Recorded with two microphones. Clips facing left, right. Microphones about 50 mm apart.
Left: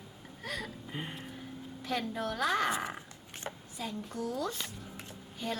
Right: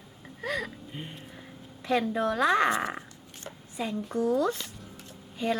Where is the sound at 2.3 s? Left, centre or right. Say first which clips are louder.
Right 6 dB; right.